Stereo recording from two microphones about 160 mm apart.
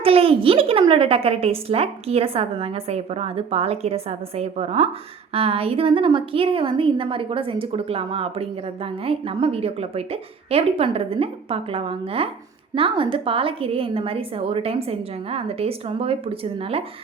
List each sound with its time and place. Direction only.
0.0 s a woman's voice: 35° right (ahead or behind)